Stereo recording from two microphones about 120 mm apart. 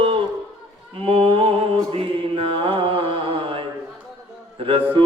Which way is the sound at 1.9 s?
50° right (ahead or behind).